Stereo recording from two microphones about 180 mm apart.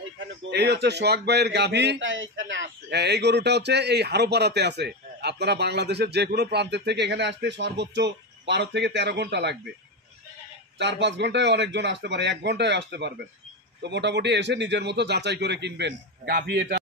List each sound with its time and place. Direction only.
0.5 s speech: 70° right (ahead or behind)
10.8 s speech: 75° right (ahead or behind)